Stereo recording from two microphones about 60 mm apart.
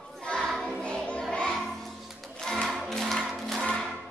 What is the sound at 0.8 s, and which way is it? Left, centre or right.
Music, centre.